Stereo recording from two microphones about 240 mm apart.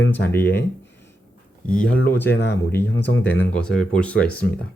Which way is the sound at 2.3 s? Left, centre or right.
Left.